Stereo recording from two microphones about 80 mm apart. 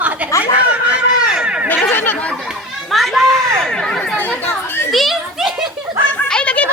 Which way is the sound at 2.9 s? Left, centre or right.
Centre.